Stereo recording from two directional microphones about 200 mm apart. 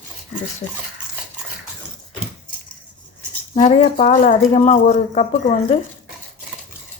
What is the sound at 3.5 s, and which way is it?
Speech, 40° left (ahead or behind).